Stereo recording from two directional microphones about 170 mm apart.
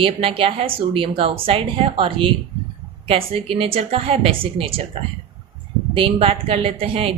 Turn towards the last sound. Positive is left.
turn(degrees=-35)  # may be behind; listen again after turning